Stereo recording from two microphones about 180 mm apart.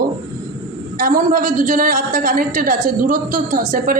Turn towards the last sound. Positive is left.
turn(degrees=-40)  # may be behind; listen again after turning